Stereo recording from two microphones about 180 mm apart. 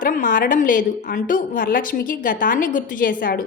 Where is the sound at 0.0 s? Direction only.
45° left (ahead or behind).